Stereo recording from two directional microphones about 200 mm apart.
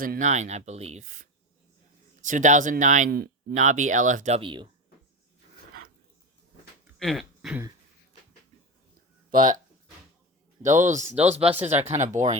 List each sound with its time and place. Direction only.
0.0 s speech: 40° right (ahead or behind); by 4.7 s 25° right (ahead or behind)
7.0 s speech: centre (ahead or behind)
10.7 s speech: 15° right (ahead or behind)
11.1 s speech: 35° right (ahead or behind)
11.3 s speech: 5° right (ahead or behind)
11.6 s speech: 35° right (ahead or behind)